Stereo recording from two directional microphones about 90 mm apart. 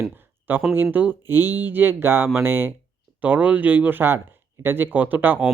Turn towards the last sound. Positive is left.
turn(degrees=-20)  # may be behind; listen again after turning